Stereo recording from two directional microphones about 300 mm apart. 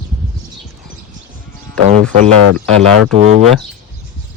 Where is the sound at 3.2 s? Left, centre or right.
Right.